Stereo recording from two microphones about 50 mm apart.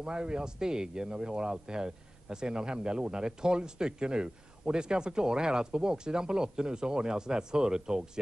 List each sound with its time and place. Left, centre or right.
0.0 s speech: centre